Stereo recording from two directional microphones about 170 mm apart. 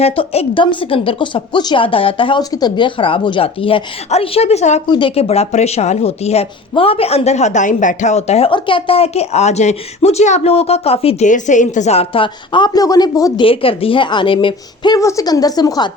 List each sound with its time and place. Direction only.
0.0 s speech: 35° left (ahead or behind)
4.9 s speech: 30° left (ahead or behind)
11.3 s speech: 45° left (ahead or behind); by 13.4 s 20° left (ahead or behind)
13.4 s speech: 30° left (ahead or behind)